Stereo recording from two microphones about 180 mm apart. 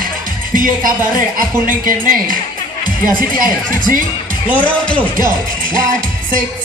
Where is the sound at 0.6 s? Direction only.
50° right (ahead or behind).